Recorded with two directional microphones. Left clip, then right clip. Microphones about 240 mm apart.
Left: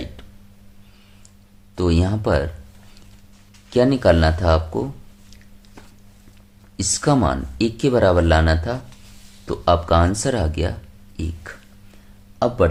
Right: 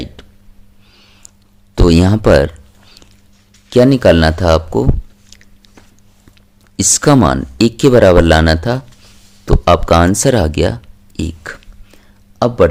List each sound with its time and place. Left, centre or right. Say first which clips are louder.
0.2 s a sound: right 6 dB; right
1.7 s speech: right 10 dB; right
3.7 s speech: right 7 dB; right
6.7 s speech: right 9 dB; right
11.2 s a sound: right 9 dB; right
12.4 s speech: right 7 dB; right